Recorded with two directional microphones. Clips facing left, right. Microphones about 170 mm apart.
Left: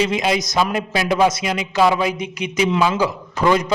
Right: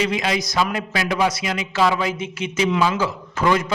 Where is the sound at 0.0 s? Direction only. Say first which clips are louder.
Left 3 dB; 20° left (ahead or behind).